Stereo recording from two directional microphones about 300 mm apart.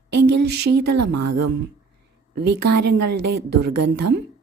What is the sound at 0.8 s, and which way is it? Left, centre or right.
Speech, right.